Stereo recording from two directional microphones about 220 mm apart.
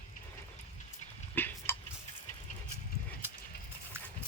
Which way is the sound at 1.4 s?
10° left (ahead or behind).